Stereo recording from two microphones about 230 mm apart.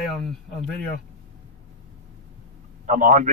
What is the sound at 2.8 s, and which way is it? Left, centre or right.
Speech, right.